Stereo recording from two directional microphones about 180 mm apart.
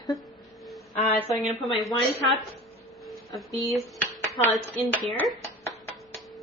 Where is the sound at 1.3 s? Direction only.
Centre (ahead or behind).